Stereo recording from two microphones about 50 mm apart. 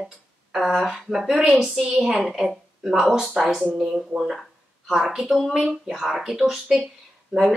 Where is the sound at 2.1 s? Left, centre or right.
Centre.